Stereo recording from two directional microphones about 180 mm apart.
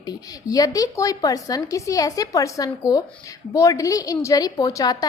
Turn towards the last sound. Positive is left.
turn(degrees=20)  # may be behind; listen again after turning